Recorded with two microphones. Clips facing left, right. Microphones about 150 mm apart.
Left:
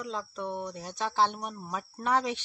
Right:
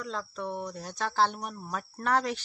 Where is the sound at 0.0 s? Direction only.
10° left (ahead or behind).